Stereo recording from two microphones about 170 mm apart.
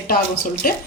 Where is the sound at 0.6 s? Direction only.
55° left (ahead or behind).